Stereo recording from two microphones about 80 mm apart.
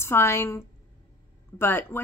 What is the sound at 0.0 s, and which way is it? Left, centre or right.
A woman's voice, left.